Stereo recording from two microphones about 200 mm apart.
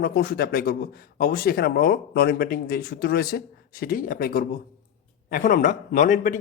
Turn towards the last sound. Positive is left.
turn(degrees=40)  # may be behind; listen again after turning